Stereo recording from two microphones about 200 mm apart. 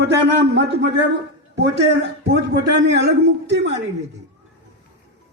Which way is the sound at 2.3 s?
55° right (ahead or behind).